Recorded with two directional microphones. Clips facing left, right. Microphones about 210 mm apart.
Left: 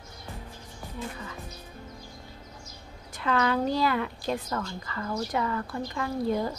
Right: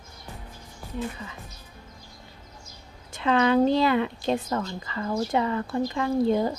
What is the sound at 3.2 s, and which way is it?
A woman's voice, 20° right (ahead or behind).